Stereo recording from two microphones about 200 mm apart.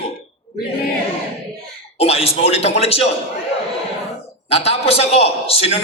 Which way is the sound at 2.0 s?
30° left (ahead or behind).